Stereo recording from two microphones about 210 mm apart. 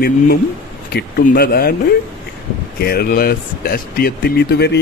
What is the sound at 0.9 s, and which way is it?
Speech, 45° left (ahead or behind).